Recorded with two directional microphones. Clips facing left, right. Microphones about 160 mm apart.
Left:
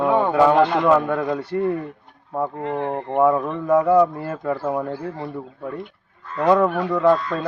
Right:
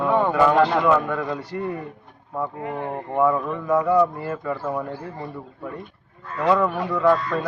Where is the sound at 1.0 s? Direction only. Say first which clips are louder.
Left 4 dB; 30° left (ahead or behind).